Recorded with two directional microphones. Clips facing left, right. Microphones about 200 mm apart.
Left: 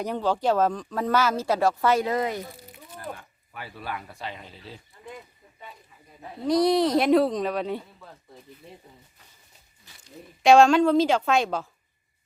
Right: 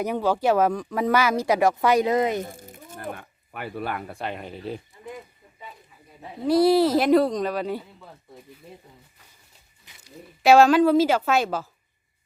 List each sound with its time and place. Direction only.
0.0 s speech: 10° right (ahead or behind)
2.4 s speech: 45° right (ahead or behind)
6.2 s speech: 5° right (ahead or behind)
10.0 s speech: 5° right (ahead or behind)